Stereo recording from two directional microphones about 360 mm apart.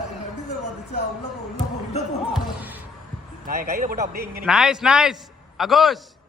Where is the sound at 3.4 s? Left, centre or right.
Right.